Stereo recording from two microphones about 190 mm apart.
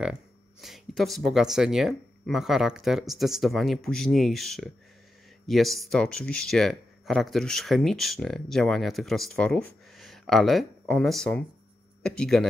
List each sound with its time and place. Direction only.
0.0 s speech: 5° right (ahead or behind)